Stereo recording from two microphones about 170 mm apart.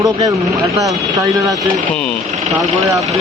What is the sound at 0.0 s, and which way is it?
Speech, 20° right (ahead or behind).